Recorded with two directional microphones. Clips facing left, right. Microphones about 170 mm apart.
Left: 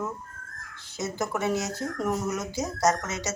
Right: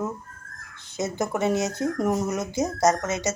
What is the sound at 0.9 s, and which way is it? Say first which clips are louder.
A woman's voice: right 3 dB; 20° right (ahead or behind).